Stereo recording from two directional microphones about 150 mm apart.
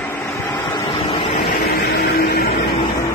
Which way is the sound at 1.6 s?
90° left.